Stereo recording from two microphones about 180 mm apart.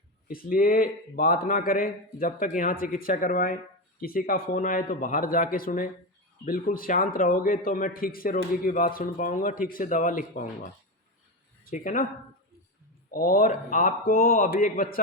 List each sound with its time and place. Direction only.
0.3 s a man's voice: 50° left (ahead or behind)
11.7 s a man's voice: 50° left (ahead or behind)
13.1 s a man's voice: 55° left (ahead or behind)